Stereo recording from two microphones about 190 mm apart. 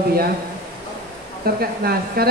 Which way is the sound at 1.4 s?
55° right (ahead or behind).